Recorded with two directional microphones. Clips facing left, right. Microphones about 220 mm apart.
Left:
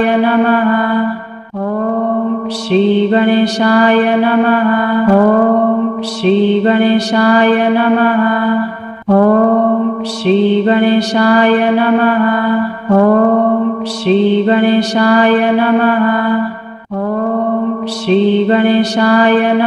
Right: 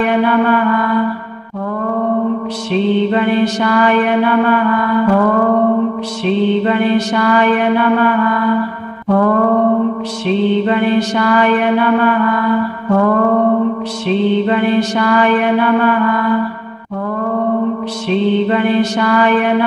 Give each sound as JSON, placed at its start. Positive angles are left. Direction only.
{"t": 0.0, "sound": "mantra", "side_deg": 35}
{"t": 2.7, "sound": "mantra", "side_deg": 35}
{"t": 6.2, "sound": "mantra", "side_deg": 35}
{"t": 10.2, "sound": "mantra", "side_deg": 35}
{"t": 18.0, "sound": "mantra", "side_deg": 35}